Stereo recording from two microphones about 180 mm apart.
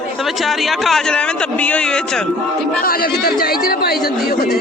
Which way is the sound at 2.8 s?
55° left (ahead or behind).